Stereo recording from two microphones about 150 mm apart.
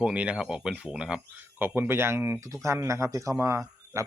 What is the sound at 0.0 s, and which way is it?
Speech, 10° right (ahead or behind).